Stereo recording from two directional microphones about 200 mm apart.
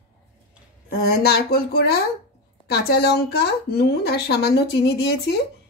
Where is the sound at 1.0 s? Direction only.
50° left (ahead or behind).